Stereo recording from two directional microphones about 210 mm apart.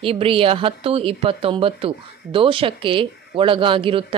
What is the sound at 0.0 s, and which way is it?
Speech, 25° right (ahead or behind).